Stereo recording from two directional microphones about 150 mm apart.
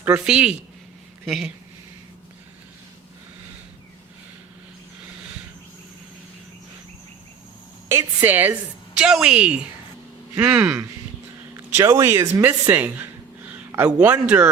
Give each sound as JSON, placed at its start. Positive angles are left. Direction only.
{"t": 0.0, "sound": "a woman's voice", "side_deg": -5}
{"t": 7.9, "sound": "a woman's voice", "side_deg": -15}
{"t": 11.5, "sound": "speech", "side_deg": -20}